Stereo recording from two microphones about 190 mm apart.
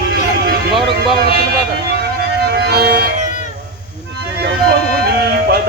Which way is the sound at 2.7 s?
55° right (ahead or behind).